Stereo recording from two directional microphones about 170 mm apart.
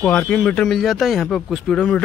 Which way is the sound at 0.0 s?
5° left (ahead or behind).